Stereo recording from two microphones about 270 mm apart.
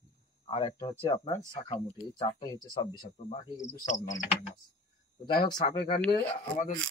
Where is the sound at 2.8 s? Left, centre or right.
Centre.